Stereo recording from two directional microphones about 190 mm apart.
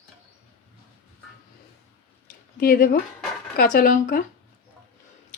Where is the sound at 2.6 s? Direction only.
50° left (ahead or behind).